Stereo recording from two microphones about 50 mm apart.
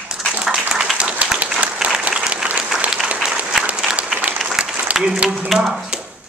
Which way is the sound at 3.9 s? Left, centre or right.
Centre.